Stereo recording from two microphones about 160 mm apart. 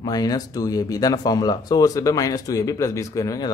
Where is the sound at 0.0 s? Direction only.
25° left (ahead or behind).